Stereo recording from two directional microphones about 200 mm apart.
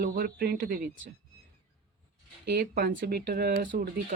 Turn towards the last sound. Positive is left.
turn(degrees=-45)  # may be behind; listen again after turning